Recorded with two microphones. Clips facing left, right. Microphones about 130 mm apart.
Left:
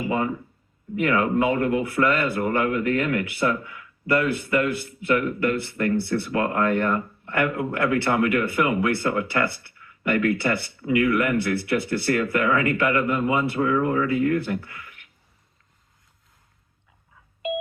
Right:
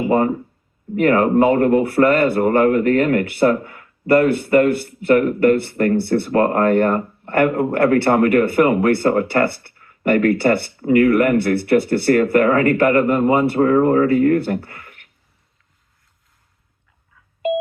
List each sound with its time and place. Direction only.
0.0 s speech: 45° right (ahead or behind)
10.8 s speech: 45° right (ahead or behind)